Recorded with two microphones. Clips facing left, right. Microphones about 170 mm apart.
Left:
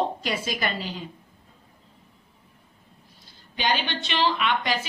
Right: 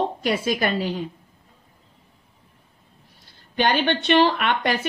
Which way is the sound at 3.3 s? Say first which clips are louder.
Right 5 dB; 55° right (ahead or behind).